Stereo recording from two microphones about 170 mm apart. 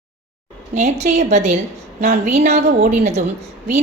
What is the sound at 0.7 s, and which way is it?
A woman's voice, 40° right (ahead or behind).